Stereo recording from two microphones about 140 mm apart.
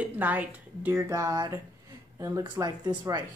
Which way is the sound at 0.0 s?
10° right (ahead or behind).